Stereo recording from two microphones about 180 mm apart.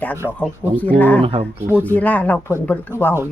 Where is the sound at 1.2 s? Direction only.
30° right (ahead or behind).